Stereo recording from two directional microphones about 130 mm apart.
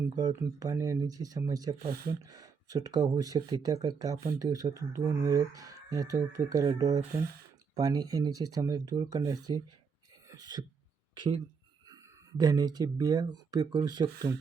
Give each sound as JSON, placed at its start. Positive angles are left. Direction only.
{"t": 0.2, "sound": "speech", "side_deg": -30}
{"t": 10.2, "sound": "throat clearing", "side_deg": -30}
{"t": 12.4, "sound": "speech", "side_deg": -30}